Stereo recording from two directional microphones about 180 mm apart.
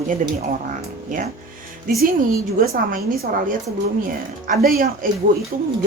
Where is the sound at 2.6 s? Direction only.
50° right (ahead or behind).